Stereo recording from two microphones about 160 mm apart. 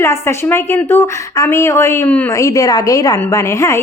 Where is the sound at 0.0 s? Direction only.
15° left (ahead or behind).